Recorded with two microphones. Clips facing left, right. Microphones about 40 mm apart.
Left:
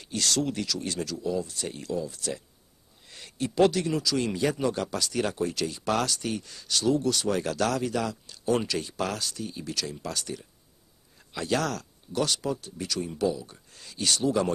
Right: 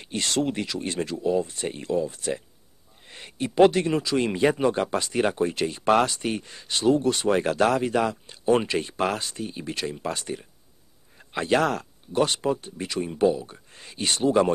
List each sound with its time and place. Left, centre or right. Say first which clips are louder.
0.0 s speech: right 2 dB; right